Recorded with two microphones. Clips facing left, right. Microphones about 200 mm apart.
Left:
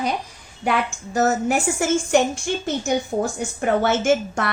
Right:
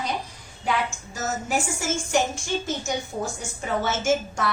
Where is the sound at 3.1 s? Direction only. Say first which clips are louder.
Left 9 dB; 75° left (ahead or behind).